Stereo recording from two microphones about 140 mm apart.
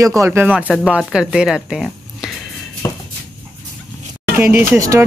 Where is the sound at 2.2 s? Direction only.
5° right (ahead or behind).